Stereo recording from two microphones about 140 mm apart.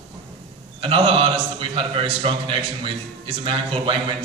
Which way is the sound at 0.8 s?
40° right (ahead or behind).